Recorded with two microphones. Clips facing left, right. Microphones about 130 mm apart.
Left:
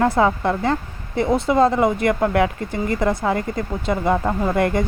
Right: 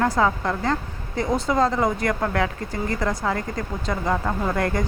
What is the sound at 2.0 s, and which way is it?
Speech, 25° left (ahead or behind).